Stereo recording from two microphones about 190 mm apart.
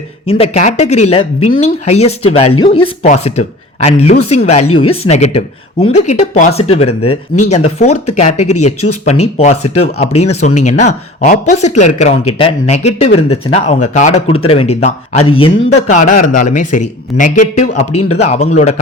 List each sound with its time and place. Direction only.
0.3 s speech: 30° left (ahead or behind)
15.7 s speech: 40° left (ahead or behind)